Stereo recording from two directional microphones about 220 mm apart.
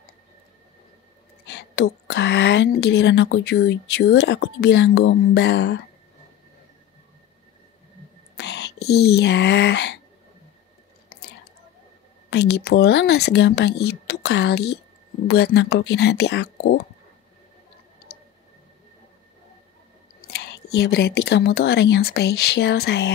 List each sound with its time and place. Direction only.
1.4 s a woman's voice: 50° left (ahead or behind)
8.4 s speech: 50° left (ahead or behind)
12.3 s a woman's voice: 50° left (ahead or behind)
20.2 s speech: 50° left (ahead or behind)